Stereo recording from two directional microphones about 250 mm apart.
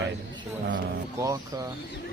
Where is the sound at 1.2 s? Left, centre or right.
Centre.